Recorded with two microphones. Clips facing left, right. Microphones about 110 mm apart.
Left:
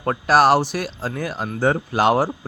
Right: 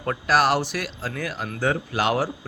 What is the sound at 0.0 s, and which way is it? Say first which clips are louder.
Speech: left 5 dB; 35° left (ahead or behind).